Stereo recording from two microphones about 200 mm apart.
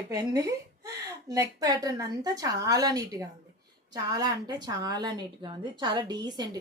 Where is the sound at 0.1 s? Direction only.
15° right (ahead or behind).